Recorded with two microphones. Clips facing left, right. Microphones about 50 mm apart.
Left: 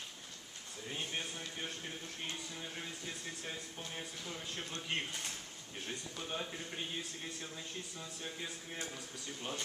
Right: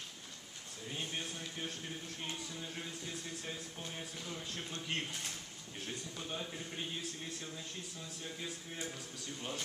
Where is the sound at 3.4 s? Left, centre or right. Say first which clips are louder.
Even; centre.